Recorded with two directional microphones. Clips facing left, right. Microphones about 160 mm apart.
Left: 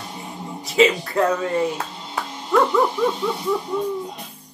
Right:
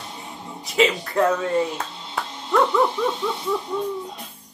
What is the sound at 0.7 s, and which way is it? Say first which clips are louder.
Speech: left 3 dB; centre (ahead or behind).